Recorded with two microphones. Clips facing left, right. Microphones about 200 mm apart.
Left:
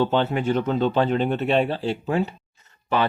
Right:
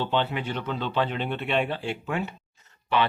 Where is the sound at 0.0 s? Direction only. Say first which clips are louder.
Left 6 dB; 45° left (ahead or behind).